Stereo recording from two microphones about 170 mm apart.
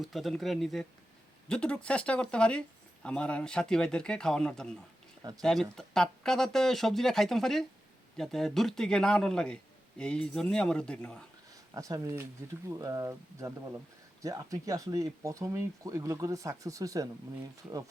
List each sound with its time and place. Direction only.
0.0 s speech: centre (ahead or behind)
11.7 s speech: 20° right (ahead or behind)